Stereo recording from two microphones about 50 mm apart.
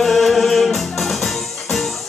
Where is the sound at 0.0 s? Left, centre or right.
Centre.